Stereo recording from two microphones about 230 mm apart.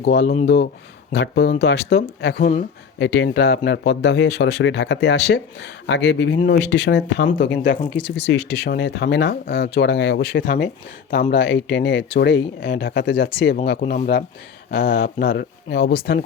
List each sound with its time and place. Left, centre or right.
0.0 s speech: left
3.0 s speech: left
10.4 s speech: left
11.1 s speech: left
13.8 s speech: left
14.7 s speech: left